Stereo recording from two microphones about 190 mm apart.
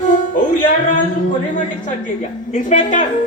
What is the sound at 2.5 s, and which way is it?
Speech, 40° left (ahead or behind).